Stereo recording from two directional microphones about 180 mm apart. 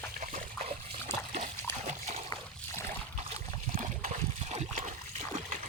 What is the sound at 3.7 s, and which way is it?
Splash, 45° right (ahead or behind).